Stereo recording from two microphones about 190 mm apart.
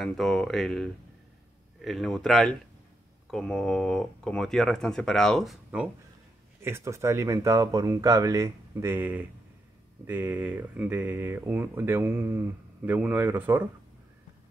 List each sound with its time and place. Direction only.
0.0 s speech: centre (ahead or behind)
1.9 s speech: centre (ahead or behind)
6.6 s speech: 15° right (ahead or behind)